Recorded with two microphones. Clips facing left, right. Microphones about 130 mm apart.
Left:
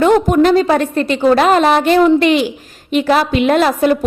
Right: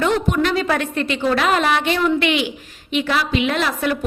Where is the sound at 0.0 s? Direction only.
45° left (ahead or behind).